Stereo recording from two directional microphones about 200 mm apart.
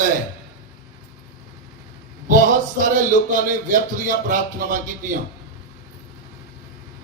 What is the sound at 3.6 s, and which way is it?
A man's voice, 40° right (ahead or behind).